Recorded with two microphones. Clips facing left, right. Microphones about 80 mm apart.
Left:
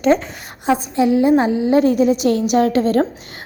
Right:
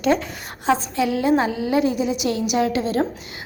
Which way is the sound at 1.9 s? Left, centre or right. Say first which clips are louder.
Left 7 dB; left.